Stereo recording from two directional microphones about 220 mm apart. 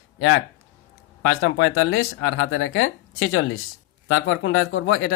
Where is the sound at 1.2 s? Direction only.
70° left (ahead or behind).